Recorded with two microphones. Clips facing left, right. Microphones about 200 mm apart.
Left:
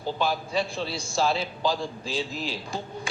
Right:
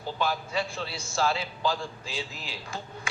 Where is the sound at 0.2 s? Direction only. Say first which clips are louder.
Left 1 dB; 15° left (ahead or behind).